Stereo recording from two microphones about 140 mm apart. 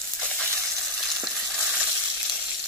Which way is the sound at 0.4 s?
5° left (ahead or behind).